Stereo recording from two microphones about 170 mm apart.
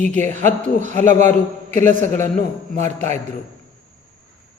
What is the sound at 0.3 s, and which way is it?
Speech, 45° right (ahead or behind).